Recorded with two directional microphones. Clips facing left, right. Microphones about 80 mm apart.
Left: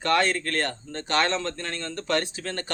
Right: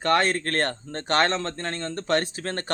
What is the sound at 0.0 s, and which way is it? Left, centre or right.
Speech, right.